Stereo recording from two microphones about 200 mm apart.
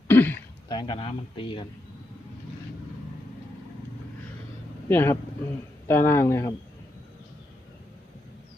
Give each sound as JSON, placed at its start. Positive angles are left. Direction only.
{"t": 0.1, "sound": "throat clearing", "side_deg": 10}
{"t": 0.7, "sound": "speech", "side_deg": 25}
{"t": 4.9, "sound": "speech", "side_deg": 10}